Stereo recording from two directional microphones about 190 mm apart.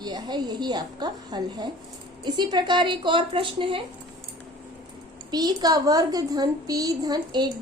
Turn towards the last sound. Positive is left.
turn(degrees=-20)  # may be behind; listen again after turning